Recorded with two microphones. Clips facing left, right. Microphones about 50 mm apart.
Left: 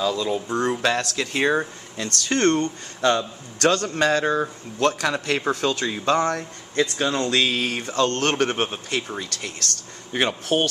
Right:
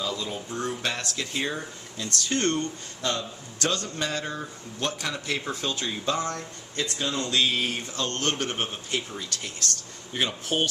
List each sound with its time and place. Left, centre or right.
0.0 s a man's voice: left
3.9 s speech: left
7.1 s a man's voice: left
7.3 s speech: left
7.9 s speech: left